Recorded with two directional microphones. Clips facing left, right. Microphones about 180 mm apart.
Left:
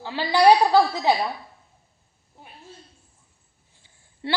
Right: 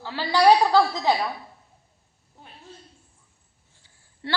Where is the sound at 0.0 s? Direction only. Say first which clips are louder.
Left 1 dB; 15° left (ahead or behind).